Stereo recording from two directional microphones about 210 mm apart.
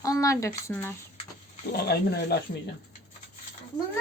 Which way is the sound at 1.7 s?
50° left (ahead or behind).